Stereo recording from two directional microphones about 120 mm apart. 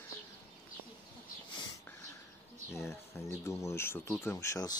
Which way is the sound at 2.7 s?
25° left (ahead or behind).